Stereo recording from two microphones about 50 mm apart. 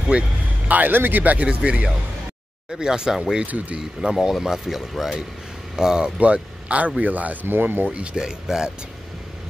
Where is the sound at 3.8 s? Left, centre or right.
Centre.